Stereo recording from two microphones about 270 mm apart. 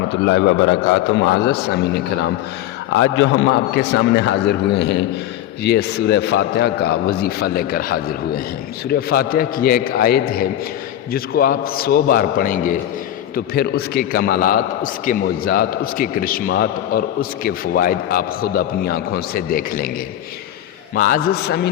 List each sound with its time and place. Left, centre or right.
0.1 s a man's voice: left
20.9 s a man's voice: left